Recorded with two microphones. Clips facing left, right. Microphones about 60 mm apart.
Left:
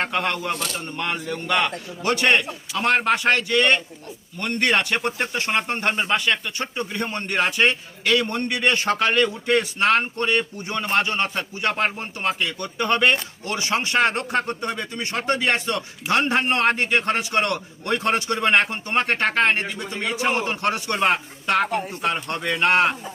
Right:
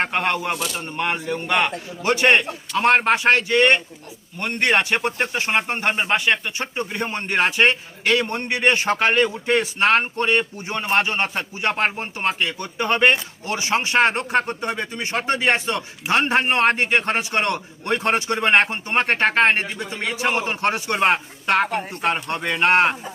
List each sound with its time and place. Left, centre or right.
0.0 s speech: right